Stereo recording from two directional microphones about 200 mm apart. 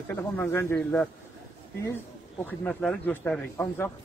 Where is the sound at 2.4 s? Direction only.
5° left (ahead or behind).